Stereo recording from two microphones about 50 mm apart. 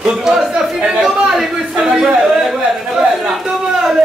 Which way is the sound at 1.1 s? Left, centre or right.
Centre.